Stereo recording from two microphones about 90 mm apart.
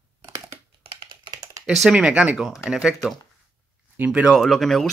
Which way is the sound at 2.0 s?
15° right (ahead or behind).